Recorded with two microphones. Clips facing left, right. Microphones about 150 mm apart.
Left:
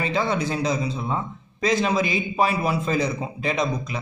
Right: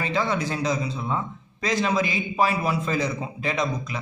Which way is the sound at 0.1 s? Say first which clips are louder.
Left 1 dB; 25° left (ahead or behind).